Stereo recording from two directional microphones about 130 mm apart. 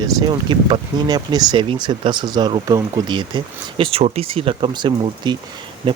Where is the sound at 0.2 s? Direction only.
35° right (ahead or behind).